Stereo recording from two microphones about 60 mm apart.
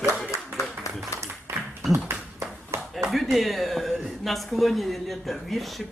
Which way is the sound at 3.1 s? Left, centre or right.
Centre.